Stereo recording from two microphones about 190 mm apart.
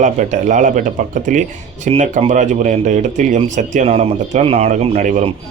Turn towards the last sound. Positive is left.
turn(degrees=-35)  # may be behind; listen again after turning